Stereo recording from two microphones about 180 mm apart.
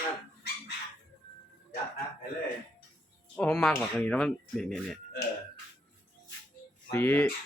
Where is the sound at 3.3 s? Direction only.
5° left (ahead or behind).